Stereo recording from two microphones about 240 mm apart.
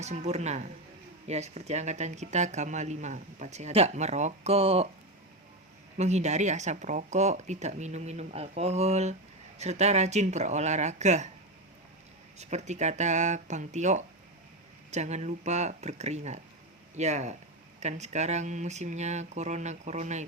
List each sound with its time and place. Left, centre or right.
0.0 s speech: right
6.0 s speech: right
12.4 s speech: right